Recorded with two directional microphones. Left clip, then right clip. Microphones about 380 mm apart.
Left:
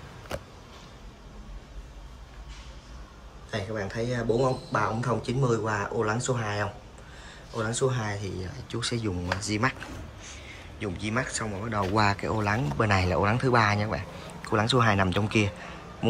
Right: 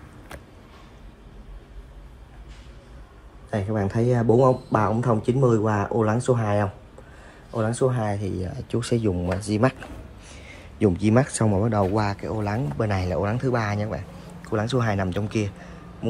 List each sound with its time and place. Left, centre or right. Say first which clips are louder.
3.4 s speech: right 5 dB; centre
10.8 s speech: right 10 dB; centre